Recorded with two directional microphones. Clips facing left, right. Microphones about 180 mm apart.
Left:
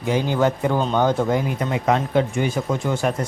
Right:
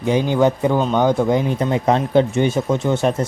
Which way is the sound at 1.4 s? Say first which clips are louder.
Right 3 dB; 30° right (ahead or behind).